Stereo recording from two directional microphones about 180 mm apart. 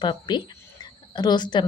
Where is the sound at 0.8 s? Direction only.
25° left (ahead or behind).